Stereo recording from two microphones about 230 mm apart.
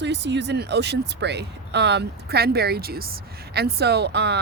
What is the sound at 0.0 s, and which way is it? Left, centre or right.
Speech, right.